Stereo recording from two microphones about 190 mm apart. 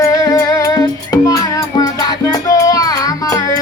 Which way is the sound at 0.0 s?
20° left (ahead or behind).